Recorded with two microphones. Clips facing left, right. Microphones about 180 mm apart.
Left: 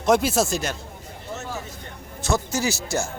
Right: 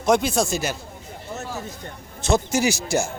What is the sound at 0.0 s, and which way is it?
Speech, 5° left (ahead or behind).